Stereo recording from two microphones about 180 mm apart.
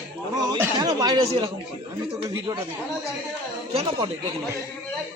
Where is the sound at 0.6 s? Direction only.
20° right (ahead or behind).